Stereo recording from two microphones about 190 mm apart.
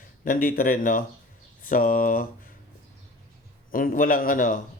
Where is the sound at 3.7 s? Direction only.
50° left (ahead or behind).